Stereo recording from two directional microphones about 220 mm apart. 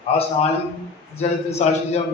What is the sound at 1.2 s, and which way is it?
Speech, 30° left (ahead or behind).